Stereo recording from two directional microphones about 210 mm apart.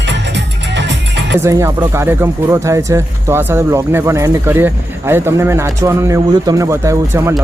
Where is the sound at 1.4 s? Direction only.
15° right (ahead or behind).